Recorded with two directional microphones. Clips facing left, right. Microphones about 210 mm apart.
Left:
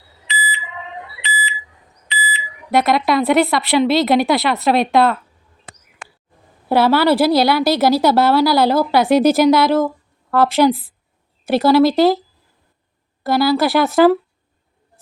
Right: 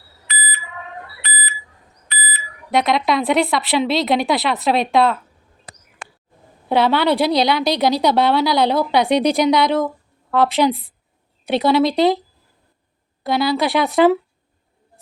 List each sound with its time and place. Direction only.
0.0 s alarm: 20° left (ahead or behind)
2.0 s smoke detector: 15° left (ahead or behind)
2.6 s a woman's voice: centre (ahead or behind)
6.7 s a woman's voice: 5° left (ahead or behind)
13.2 s a woman's voice: centre (ahead or behind)